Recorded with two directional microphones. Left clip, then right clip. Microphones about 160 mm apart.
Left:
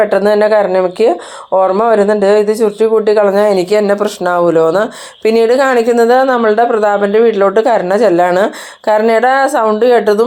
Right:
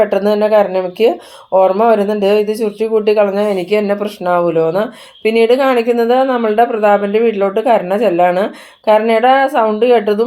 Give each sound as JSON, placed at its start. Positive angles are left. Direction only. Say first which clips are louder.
{"t": 0.1, "sound": "speech", "louder": "left 2 dB", "side_deg": 25}